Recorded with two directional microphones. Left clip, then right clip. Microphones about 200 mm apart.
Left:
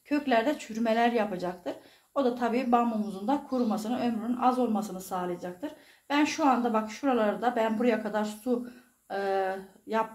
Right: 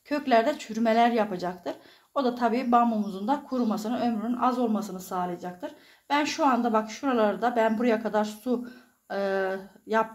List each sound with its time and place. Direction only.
0.1 s speech: 40° right (ahead or behind)